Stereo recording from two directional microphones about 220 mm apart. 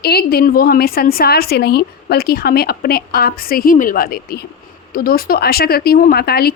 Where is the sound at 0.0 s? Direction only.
45° left (ahead or behind).